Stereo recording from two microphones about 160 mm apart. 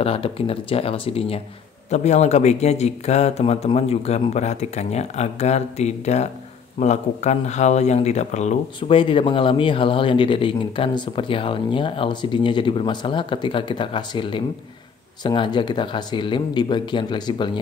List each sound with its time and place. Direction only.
0.0 s speech: 35° left (ahead or behind)
8.7 s speech: 30° left (ahead or behind)